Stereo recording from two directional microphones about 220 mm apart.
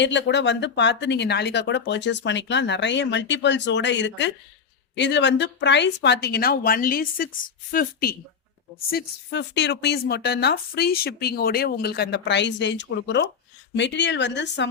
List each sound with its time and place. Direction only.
0.0 s speech: 55° left (ahead or behind)